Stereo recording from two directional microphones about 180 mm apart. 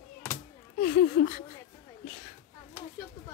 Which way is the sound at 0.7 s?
55° left (ahead or behind).